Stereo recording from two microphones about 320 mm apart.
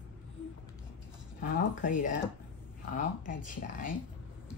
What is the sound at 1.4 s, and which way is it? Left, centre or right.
Speech, left.